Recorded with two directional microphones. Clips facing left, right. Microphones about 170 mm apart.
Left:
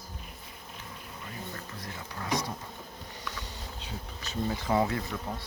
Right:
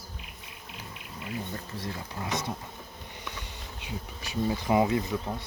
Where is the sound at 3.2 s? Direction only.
15° right (ahead or behind).